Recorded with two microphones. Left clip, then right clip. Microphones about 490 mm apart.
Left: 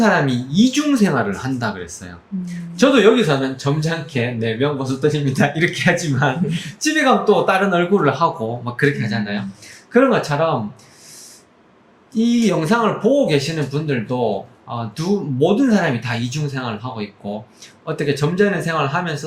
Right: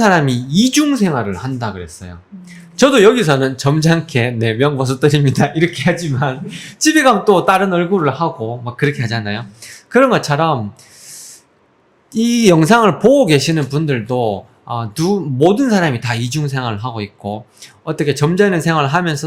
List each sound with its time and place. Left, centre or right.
0.0 s a man's voice: right
2.7 s speech: right
5.4 s a man's voice: right
12.1 s speech: right